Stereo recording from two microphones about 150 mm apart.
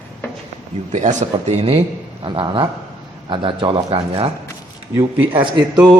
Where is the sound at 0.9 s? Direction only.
50° right (ahead or behind); by 4.2 s 35° right (ahead or behind).